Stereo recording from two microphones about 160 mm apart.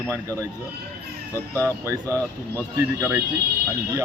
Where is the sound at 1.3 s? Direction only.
15° left (ahead or behind).